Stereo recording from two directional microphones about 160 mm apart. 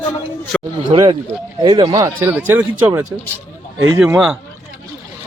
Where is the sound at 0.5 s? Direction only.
5° left (ahead or behind).